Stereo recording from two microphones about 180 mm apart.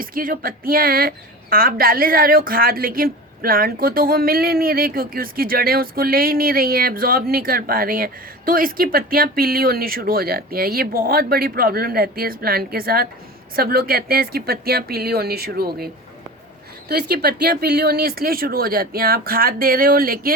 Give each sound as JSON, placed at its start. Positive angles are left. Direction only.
{"t": 0.0, "sound": "speech", "side_deg": -50}
{"t": 16.9, "sound": "speech", "side_deg": -65}